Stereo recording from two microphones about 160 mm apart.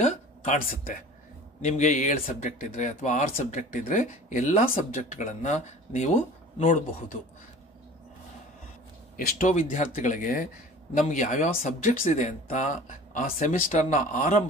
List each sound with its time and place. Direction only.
0.0 s speech: 50° left (ahead or behind)
9.1 s speech: 55° left (ahead or behind)
11.0 s speech: 50° left (ahead or behind)